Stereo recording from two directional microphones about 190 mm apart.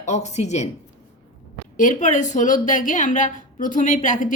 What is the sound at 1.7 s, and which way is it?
Speech, 45° left (ahead or behind).